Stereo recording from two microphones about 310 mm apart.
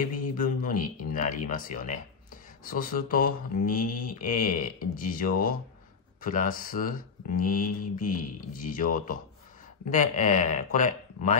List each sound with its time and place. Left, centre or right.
0.0 s speech: left